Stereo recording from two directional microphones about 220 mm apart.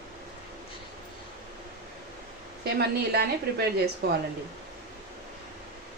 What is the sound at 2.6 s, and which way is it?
A woman's voice, 45° right (ahead or behind).